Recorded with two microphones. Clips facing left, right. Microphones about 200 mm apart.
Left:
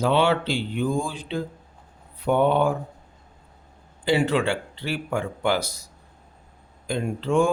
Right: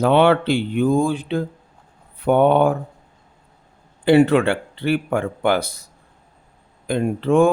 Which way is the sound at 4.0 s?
60° right (ahead or behind).